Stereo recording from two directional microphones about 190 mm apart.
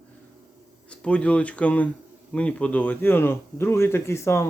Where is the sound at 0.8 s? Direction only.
5° left (ahead or behind).